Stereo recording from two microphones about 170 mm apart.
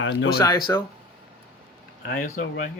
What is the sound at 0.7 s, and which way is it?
Speech, 15° left (ahead or behind).